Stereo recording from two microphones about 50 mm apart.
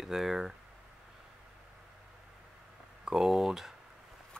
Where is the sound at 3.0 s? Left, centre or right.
Centre.